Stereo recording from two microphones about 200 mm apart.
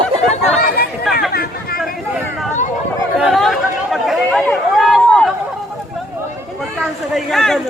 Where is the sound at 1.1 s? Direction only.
Centre (ahead or behind).